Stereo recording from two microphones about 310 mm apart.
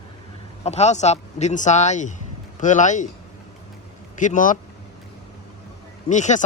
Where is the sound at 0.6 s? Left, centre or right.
Left.